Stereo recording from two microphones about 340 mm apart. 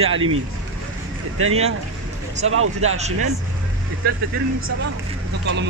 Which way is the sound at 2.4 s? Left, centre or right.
Right.